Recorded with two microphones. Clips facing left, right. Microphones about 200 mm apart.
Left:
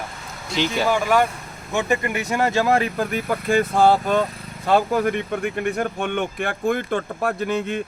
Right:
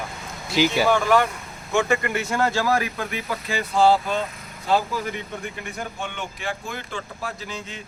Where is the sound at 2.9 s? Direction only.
50° left (ahead or behind).